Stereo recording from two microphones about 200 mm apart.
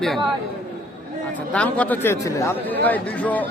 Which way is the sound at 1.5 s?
5° left (ahead or behind).